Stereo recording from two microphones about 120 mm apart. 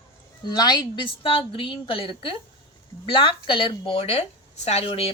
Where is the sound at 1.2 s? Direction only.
45° left (ahead or behind).